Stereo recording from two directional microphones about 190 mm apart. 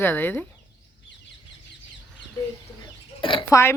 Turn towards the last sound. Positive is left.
turn(degrees=15)  # may be behind; listen again after turning